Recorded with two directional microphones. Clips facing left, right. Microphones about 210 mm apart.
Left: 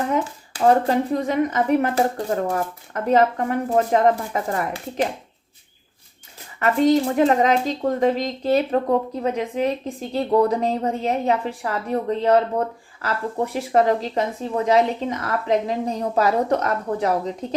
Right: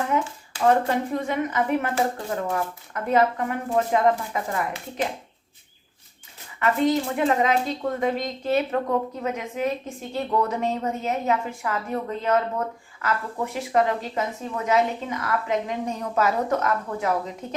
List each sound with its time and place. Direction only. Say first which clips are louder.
0.6 s speech: left 3 dB; 35° left (ahead or behind)
6.6 s speech: left 4 dB; 40° left (ahead or behind)